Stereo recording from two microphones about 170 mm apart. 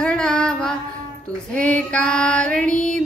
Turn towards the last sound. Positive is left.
turn(degrees=5)  # may be behind; listen again after turning